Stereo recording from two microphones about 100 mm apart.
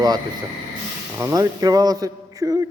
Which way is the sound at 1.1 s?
30° right (ahead or behind).